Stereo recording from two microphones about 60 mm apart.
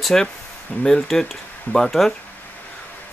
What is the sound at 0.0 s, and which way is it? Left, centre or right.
Speech, centre.